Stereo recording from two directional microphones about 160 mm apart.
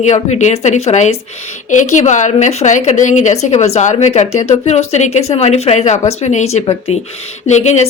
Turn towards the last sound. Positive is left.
turn(degrees=45)  # may be behind; listen again after turning